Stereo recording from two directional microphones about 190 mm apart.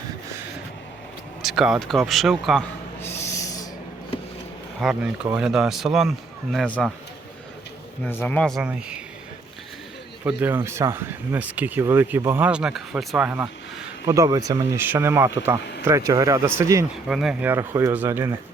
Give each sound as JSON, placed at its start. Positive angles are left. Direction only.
{"t": 1.4, "sound": "speech", "side_deg": 0}
{"t": 3.0, "sound": "owl", "side_deg": 10}
{"t": 4.8, "sound": "speech", "side_deg": -5}
{"t": 8.0, "sound": "speech", "side_deg": 10}
{"t": 10.2, "sound": "speech", "side_deg": -10}
{"t": 14.0, "sound": "speech", "side_deg": -15}
{"t": 17.1, "sound": "speech", "side_deg": -5}